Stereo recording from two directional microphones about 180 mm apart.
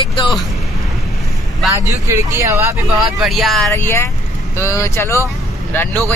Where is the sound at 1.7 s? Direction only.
15° right (ahead or behind).